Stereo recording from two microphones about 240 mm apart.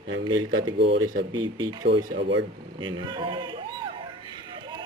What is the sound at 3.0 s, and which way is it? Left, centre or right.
Speech, centre.